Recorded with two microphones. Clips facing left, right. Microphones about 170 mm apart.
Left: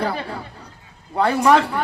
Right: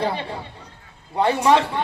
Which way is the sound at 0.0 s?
25° right (ahead or behind).